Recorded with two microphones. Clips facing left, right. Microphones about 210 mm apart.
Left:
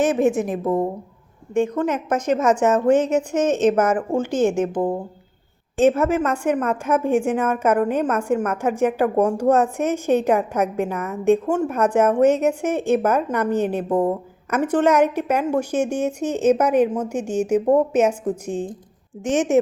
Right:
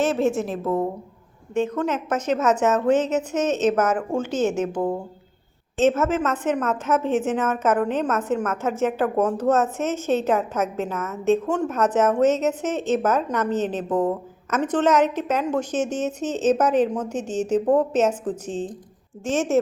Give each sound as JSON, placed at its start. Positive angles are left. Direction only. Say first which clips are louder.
{"t": 0.0, "sound": "a woman's voice", "louder": "left 3 dB", "side_deg": 15}